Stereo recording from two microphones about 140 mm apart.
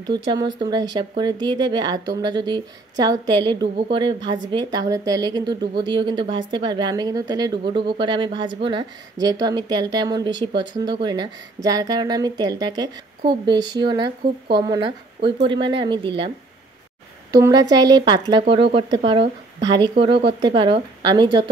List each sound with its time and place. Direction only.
0.0 s a woman's voice: 30° right (ahead or behind)
17.3 s a woman's voice: 30° right (ahead or behind)